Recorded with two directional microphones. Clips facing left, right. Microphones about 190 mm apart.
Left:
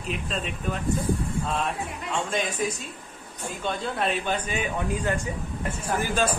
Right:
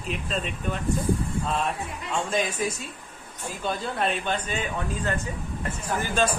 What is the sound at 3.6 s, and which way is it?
Speech, centre (ahead or behind).